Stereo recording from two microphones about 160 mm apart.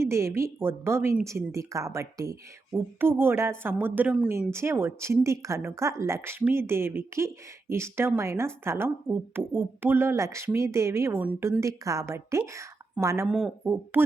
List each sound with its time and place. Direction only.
0.0 s speech: 15° right (ahead or behind)
13.2 s speech: centre (ahead or behind)
13.9 s speech: 10° right (ahead or behind)